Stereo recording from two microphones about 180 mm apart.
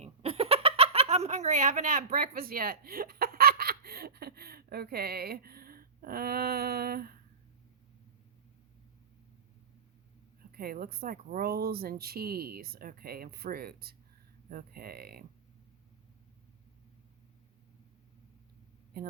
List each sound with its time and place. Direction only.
0.0 s a sound: 35° right (ahead or behind); by 7.2 s 55° right (ahead or behind)
10.5 s speech: 55° right (ahead or behind)
19.0 s speech: 60° right (ahead or behind)